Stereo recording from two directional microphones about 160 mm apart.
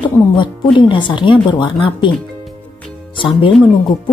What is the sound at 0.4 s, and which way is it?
Speech, 30° left (ahead or behind).